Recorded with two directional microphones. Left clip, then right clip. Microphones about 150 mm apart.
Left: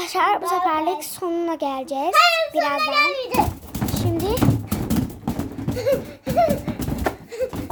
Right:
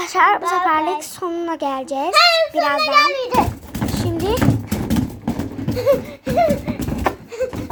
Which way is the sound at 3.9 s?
10° left (ahead or behind).